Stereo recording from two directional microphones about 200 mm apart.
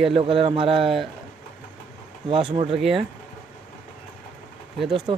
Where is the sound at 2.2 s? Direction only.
25° right (ahead or behind).